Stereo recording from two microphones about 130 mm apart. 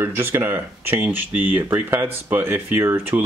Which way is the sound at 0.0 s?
20° right (ahead or behind).